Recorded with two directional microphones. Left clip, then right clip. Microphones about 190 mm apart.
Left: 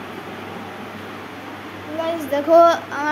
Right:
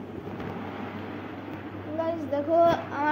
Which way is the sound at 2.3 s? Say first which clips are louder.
Left 10 dB; 35° left (ahead or behind).